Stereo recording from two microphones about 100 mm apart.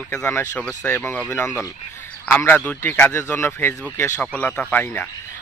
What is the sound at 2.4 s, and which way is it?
Speech, 15° left (ahead or behind).